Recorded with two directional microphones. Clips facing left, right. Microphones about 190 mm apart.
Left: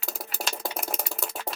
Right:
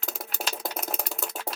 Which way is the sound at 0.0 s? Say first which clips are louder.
Even; 5° left (ahead or behind).